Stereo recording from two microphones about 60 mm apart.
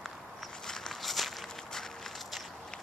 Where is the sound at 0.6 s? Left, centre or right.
Centre.